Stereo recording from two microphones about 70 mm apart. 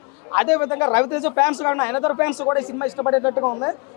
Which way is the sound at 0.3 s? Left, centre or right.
Left.